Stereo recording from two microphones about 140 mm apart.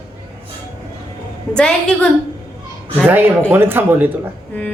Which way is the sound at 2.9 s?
15° right (ahead or behind).